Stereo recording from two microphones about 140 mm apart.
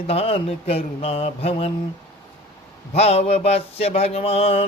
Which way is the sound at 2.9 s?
45° left (ahead or behind).